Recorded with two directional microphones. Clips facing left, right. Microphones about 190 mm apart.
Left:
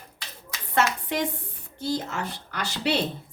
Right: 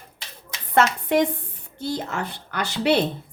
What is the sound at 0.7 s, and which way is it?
A woman's voice, 60° right (ahead or behind).